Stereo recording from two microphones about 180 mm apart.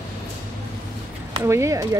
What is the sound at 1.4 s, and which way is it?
Speech, 15° right (ahead or behind).